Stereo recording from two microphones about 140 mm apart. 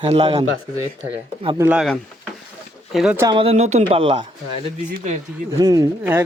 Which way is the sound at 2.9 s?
5° right (ahead or behind).